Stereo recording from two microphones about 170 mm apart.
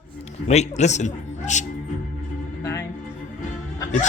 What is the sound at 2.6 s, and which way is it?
Music, 15° left (ahead or behind).